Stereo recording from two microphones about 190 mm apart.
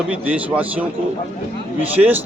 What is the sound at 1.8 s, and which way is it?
Speech, 10° right (ahead or behind).